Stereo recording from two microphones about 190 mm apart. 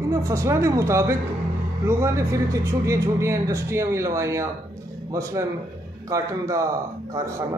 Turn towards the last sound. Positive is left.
turn(degrees=-15)  # may be behind; listen again after turning